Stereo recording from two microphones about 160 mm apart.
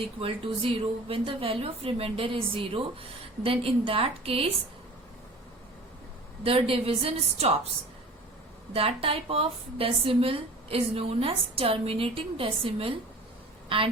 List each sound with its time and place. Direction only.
0.2 s a woman's voice: 35° right (ahead or behind)
6.4 s a woman's voice: 35° right (ahead or behind)
8.7 s a woman's voice: 35° right (ahead or behind)